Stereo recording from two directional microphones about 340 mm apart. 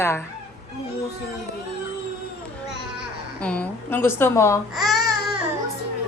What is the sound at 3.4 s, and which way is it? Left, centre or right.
Speech, centre.